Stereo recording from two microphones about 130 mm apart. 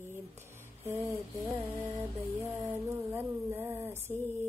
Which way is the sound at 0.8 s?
20° right (ahead or behind).